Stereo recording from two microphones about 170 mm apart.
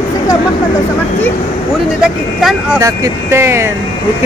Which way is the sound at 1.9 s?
5° right (ahead or behind).